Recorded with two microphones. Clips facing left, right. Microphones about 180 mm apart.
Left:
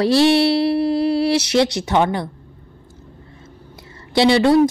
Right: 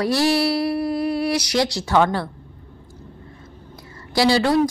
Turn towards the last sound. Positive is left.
turn(degrees=25)  # may be behind; listen again after turning